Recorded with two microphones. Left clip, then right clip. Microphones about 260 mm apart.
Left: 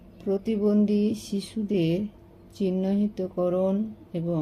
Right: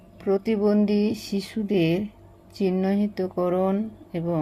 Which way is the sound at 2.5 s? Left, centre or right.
Right.